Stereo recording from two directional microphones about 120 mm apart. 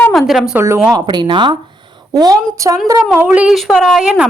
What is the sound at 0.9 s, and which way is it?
Speech, 35° right (ahead or behind).